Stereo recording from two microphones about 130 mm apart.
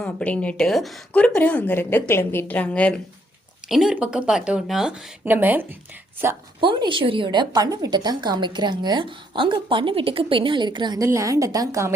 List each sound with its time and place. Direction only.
0.0 s a woman's voice: 10° left (ahead or behind)
3.7 s a woman's voice: 5° right (ahead or behind)
6.6 s a woman's voice: 40° right (ahead or behind)